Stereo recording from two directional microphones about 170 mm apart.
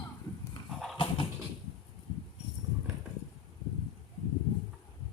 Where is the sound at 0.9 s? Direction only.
30° left (ahead or behind).